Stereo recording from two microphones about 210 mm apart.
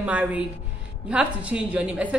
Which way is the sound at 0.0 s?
5° right (ahead or behind).